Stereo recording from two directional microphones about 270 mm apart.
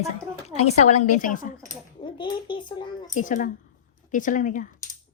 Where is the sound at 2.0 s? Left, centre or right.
Centre.